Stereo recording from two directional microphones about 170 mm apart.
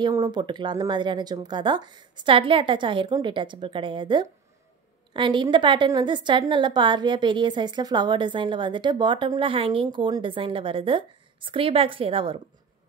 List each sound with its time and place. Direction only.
0.0 s a woman's voice: 25° right (ahead or behind)